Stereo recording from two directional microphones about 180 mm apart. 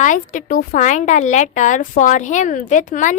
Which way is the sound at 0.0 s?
45° left (ahead or behind).